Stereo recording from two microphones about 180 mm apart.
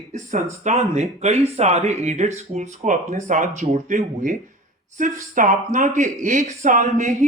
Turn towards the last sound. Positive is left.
turn(degrees=-40)  # may be behind; listen again after turning